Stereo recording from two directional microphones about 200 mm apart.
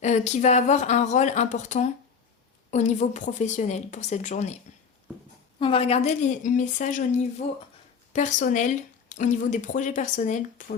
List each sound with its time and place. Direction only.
0.0 s speech: 35° left (ahead or behind)
5.5 s speech: 25° left (ahead or behind)
8.1 s speech: 40° left (ahead or behind)